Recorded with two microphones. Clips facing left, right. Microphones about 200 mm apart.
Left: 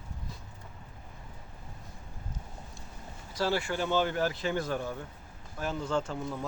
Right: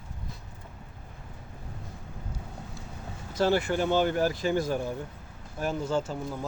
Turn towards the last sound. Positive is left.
turn(degrees=-5)  # may be behind; listen again after turning